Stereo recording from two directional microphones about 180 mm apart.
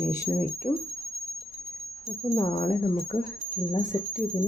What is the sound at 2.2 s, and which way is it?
Speech, 20° left (ahead or behind).